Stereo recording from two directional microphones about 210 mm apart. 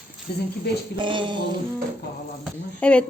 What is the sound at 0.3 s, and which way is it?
Speech, 50° left (ahead or behind).